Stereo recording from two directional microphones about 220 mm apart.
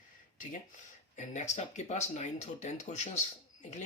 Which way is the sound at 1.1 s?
35° left (ahead or behind).